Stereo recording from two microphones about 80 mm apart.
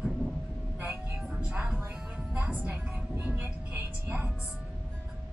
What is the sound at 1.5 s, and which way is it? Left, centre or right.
Music, centre.